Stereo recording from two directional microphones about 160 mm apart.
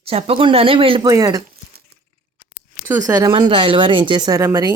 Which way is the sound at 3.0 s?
20° right (ahead or behind).